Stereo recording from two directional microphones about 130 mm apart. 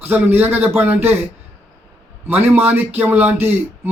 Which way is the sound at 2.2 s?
15° right (ahead or behind).